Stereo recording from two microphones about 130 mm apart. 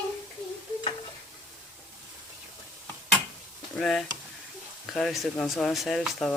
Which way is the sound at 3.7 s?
5° left (ahead or behind).